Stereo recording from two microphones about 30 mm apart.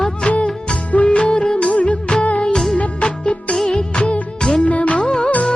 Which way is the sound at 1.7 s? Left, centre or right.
Left.